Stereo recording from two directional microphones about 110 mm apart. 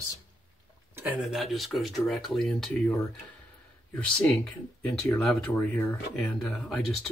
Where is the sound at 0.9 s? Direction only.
15° right (ahead or behind).